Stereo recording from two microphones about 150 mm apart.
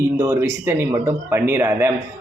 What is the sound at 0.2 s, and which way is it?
A man's voice, 15° right (ahead or behind).